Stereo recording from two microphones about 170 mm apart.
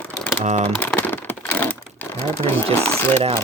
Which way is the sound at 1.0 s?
10° left (ahead or behind).